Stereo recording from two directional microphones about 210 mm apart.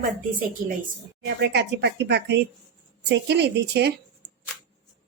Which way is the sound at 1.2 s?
55° right (ahead or behind).